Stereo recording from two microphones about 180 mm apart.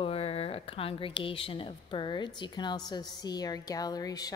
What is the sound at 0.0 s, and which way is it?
A woman's voice, 35° left (ahead or behind).